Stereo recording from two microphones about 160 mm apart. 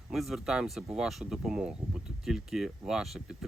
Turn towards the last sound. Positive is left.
turn(degrees=0)  # may be behind; listen again after turning